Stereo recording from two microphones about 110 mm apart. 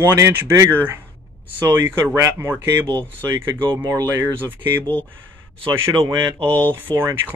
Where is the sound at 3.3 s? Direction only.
40° right (ahead or behind).